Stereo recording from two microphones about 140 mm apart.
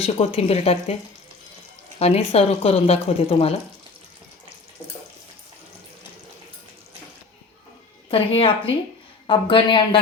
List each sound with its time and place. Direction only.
0.0 s speech: 45° left (ahead or behind)
2.0 s speech: 45° left (ahead or behind)
8.1 s speech: 40° left (ahead or behind)